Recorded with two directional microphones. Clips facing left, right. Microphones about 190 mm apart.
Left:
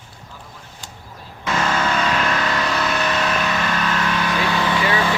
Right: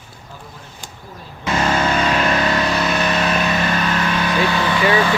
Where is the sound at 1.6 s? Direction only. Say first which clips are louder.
Right 3 dB; 30° right (ahead or behind).